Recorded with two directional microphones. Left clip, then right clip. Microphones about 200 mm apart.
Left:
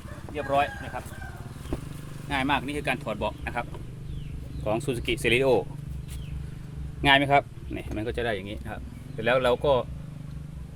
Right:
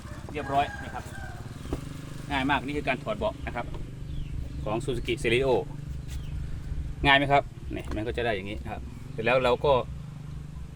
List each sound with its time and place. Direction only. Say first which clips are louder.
0.3 s speech: left 2 dB; 40° left (ahead or behind)
2.3 s speech: left 1 dB; 60° left (ahead or behind)
4.6 s speech: left 3 dB; 35° left (ahead or behind)
7.0 s speech: left 1 dB; 10° left (ahead or behind)